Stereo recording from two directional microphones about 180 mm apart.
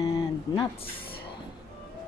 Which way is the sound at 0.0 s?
20° left (ahead or behind).